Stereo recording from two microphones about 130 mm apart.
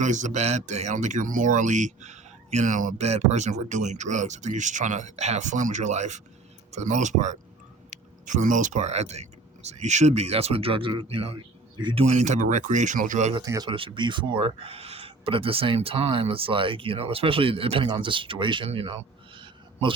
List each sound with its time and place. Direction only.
0.0 s speech: 70° right (ahead or behind); by 12.0 s 35° right (ahead or behind)
12.0 s speech: 60° right (ahead or behind); by 13.3 s 80° right
13.4 s speech: 25° right (ahead or behind)
13.7 s speech: 40° right (ahead or behind)